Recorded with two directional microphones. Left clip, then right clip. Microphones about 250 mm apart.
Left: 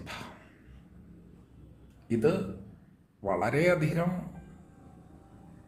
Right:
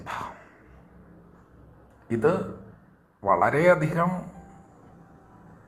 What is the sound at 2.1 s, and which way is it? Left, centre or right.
Speech, centre.